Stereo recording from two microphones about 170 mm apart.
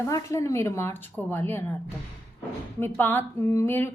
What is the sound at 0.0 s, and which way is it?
Speech, 15° left (ahead or behind).